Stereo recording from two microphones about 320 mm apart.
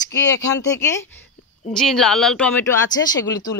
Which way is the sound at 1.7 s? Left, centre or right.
Centre.